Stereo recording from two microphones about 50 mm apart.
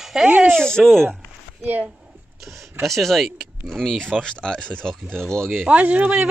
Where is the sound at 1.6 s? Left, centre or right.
Right.